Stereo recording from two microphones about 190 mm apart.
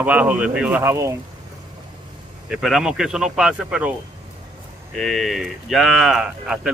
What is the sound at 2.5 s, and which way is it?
Speech, centre (ahead or behind).